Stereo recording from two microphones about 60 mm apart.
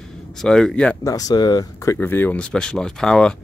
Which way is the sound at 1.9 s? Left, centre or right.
Left.